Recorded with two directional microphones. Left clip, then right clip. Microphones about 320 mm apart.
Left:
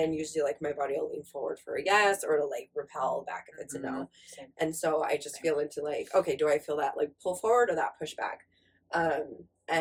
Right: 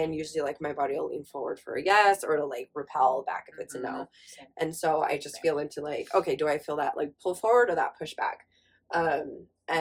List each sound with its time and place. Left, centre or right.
0.0 s speech: centre